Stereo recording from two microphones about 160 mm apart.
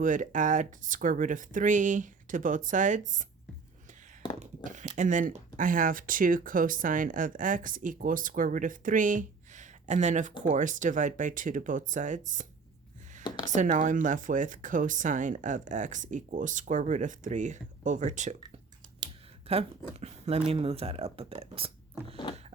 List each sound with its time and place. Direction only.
0.0 s speech: 55° right (ahead or behind)
4.4 s a sound: 50° right (ahead or behind)
4.9 s speech: 50° right (ahead or behind)
19.5 s speech: 40° right (ahead or behind)